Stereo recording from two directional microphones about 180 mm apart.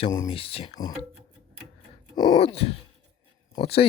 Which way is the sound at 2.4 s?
35° left (ahead or behind).